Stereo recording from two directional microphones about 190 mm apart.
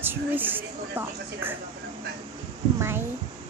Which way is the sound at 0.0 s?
10° right (ahead or behind).